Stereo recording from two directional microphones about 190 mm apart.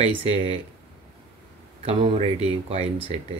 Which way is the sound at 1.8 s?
30° right (ahead or behind).